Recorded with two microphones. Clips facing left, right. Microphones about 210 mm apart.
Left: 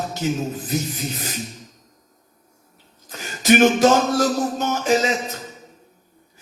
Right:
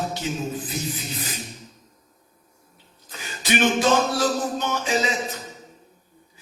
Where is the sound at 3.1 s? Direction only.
45° left (ahead or behind).